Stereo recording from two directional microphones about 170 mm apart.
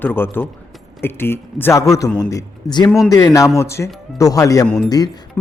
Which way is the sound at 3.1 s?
20° left (ahead or behind).